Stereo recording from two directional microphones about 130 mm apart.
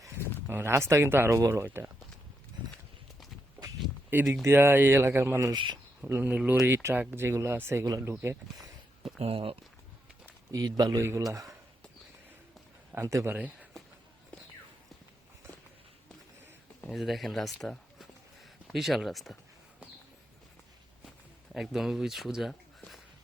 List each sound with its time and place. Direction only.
0.4 s speech: 15° right (ahead or behind)
4.1 s speech: 15° right (ahead or behind)
5.5 s speech: 35° right (ahead or behind)
6.1 s speech: 15° right (ahead or behind)
9.2 s speech: 45° right (ahead or behind)
10.2 s speech: 30° right (ahead or behind)
12.9 s a man's voice: 20° right (ahead or behind)
16.9 s speech: centre (ahead or behind)
21.5 s speech: 5° right (ahead or behind)